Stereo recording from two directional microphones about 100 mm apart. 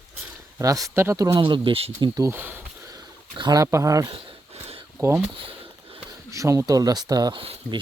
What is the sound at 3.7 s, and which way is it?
Speech, 35° right (ahead or behind).